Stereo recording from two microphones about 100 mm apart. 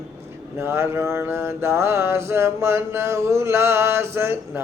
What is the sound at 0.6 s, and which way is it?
Mantra, 25° right (ahead or behind).